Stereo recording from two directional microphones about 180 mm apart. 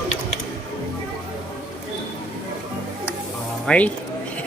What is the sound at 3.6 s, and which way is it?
Speech, 5° left (ahead or behind).